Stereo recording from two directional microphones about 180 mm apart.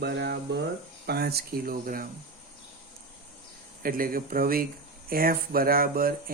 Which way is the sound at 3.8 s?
55° right (ahead or behind).